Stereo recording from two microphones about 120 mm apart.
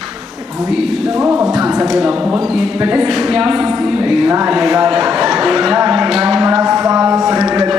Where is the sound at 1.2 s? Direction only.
15° right (ahead or behind).